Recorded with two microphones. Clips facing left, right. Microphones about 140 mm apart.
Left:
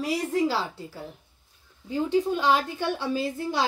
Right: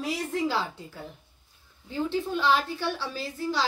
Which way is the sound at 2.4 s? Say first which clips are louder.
Right 3 dB; 45° left (ahead or behind).